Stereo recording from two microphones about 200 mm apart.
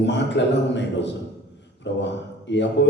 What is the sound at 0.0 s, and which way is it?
Speech, 60° left (ahead or behind).